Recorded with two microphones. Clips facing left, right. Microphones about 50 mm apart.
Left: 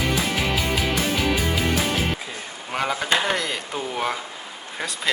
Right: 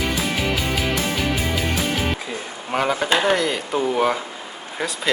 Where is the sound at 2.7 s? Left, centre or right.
Centre.